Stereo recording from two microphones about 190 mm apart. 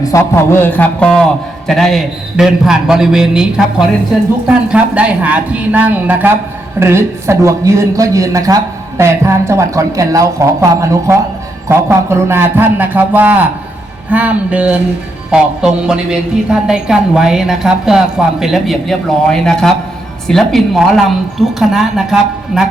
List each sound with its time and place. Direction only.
0.0 s a man's voice: 15° left (ahead or behind); by 22.7 s 5° right (ahead or behind)